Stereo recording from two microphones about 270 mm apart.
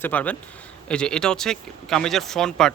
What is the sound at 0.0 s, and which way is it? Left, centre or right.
Speech, centre.